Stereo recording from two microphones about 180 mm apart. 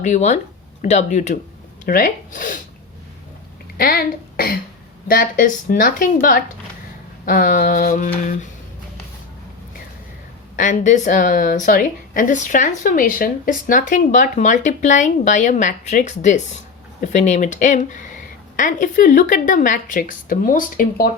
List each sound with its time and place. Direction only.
0.0 s a woman's voice: 40° left (ahead or behind)
3.8 s a woman's voice: 55° left (ahead or behind)
7.3 s a woman's voice: 50° left (ahead or behind)
10.6 s a woman's voice: 45° left (ahead or behind)